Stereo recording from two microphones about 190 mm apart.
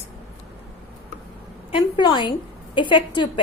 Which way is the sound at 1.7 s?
25° left (ahead or behind).